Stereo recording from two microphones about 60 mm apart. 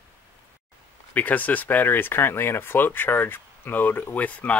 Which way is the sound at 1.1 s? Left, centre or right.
Left.